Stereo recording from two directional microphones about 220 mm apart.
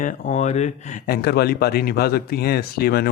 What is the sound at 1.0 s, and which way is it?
Speech, 45° left (ahead or behind).